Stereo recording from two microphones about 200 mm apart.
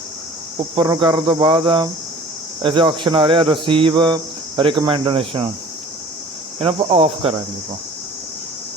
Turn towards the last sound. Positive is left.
turn(degrees=-25)  # may be behind; listen again after turning